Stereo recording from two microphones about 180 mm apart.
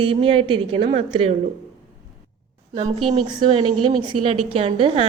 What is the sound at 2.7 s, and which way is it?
A woman's voice, 35° right (ahead or behind).